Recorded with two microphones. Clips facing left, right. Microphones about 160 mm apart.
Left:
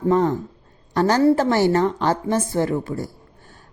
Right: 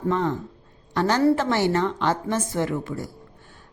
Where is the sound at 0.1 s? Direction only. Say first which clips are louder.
Left 6 dB; 40° left (ahead or behind).